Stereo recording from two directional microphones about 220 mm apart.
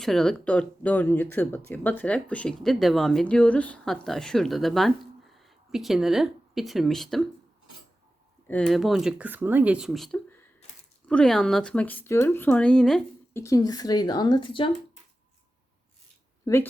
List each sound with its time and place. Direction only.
0.0 s speech: centre (ahead or behind)
8.4 s speech: 5° left (ahead or behind)
13.4 s speech: 15° left (ahead or behind)
16.5 s speech: 15° left (ahead or behind)